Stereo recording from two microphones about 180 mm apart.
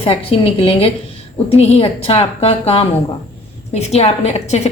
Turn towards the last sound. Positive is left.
turn(degrees=35)  # may be behind; listen again after turning